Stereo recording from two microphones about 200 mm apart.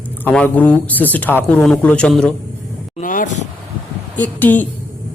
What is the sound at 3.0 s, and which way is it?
Speech, 40° left (ahead or behind).